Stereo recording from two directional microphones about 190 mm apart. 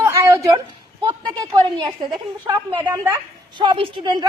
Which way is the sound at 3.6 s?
25° right (ahead or behind).